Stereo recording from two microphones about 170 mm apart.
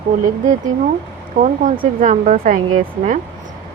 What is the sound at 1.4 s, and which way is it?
Speech, 50° right (ahead or behind).